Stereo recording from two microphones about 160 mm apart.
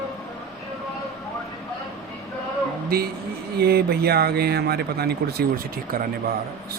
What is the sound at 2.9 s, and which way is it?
A man's voice, 70° right (ahead or behind).